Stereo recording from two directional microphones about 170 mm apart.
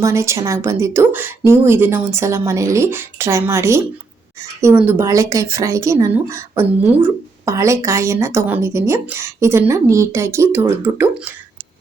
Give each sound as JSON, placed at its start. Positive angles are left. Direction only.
{"t": 0.0, "sound": "speech", "side_deg": -15}
{"t": 4.9, "sound": "speech", "side_deg": -15}